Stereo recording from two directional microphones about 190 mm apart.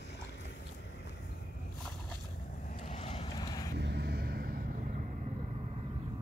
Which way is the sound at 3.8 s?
60° right (ahead or behind).